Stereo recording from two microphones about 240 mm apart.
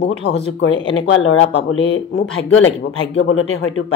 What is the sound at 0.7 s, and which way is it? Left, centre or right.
Speech, left.